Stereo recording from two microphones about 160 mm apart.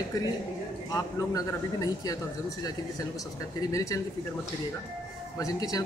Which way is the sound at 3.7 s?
20° left (ahead or behind).